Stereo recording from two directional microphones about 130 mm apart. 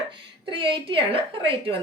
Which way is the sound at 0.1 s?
40° right (ahead or behind).